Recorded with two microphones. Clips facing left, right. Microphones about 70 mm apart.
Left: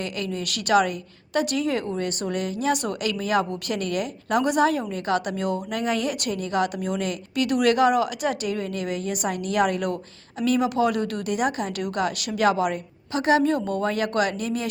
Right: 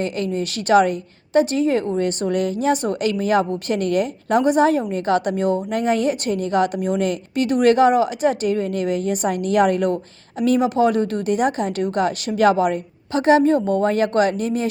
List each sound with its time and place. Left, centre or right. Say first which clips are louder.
0.0 s speech: right 6 dB; right